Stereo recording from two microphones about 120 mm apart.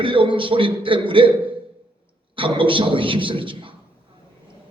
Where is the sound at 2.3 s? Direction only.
45° right (ahead or behind).